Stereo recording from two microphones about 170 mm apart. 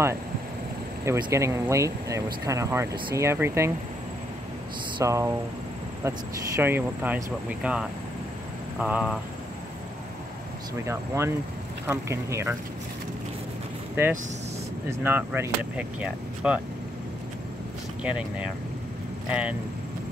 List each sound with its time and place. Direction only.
1.0 s speech: 15° right (ahead or behind)
4.9 s speech: 15° right (ahead or behind)
10.9 s speech: 15° right (ahead or behind)
14.9 s speech: 15° right (ahead or behind)
18.0 s speech: 5° right (ahead or behind)